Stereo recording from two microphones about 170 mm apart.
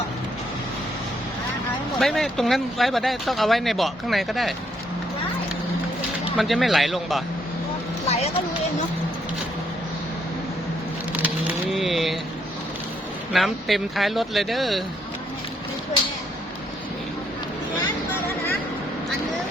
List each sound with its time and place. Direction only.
2.0 s speech: centre (ahead or behind)
6.3 s speech: centre (ahead or behind)
8.0 s a sound: 40° left (ahead or behind)
11.2 s vehicle: 5° right (ahead or behind)
13.3 s speech: centre (ahead or behind)